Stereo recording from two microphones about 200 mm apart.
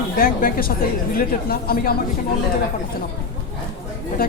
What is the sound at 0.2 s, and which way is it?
A woman's voice, 45° left (ahead or behind).